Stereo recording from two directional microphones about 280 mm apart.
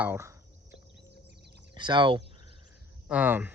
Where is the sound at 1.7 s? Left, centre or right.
Centre.